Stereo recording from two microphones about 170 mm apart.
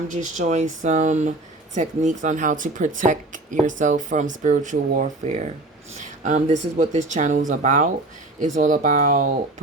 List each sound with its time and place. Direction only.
0.1 s speech: 45° right (ahead or behind)